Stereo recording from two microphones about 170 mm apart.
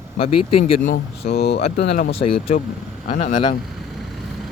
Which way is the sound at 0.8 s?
65° left (ahead or behind).